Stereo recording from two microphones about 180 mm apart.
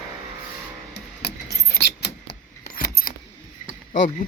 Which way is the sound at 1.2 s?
65° left (ahead or behind).